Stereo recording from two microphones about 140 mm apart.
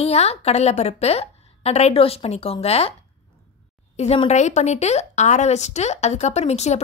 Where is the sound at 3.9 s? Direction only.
50° left (ahead or behind).